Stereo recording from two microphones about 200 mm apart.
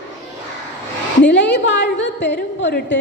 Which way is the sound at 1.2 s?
60° left (ahead or behind).